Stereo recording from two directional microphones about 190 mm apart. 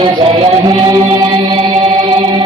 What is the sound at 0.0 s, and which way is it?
Music, 30° right (ahead or behind).